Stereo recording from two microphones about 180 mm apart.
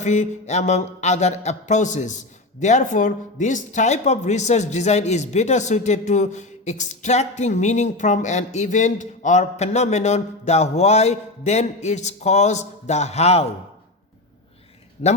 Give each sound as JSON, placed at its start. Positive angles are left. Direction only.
{"t": 0.0, "sound": "mantra", "side_deg": 40}
{"t": 15.0, "sound": "mantra", "side_deg": 40}